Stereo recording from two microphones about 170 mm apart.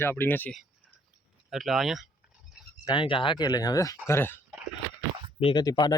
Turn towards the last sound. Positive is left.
turn(degrees=20)  # may be behind; listen again after turning